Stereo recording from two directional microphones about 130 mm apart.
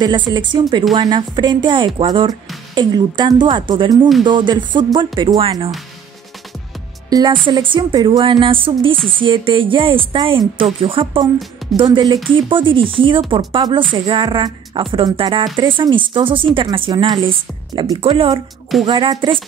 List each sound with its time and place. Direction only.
0.0 s speech: 35° right (ahead or behind)
7.1 s a woman's voice: 30° right (ahead or behind)